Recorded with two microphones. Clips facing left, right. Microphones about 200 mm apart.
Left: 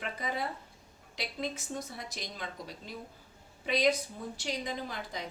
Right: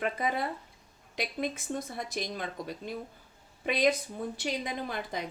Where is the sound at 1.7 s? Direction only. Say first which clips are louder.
Right 5 dB; 55° right (ahead or behind).